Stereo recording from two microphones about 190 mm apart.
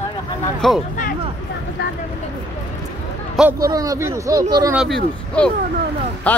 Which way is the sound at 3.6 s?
20° right (ahead or behind).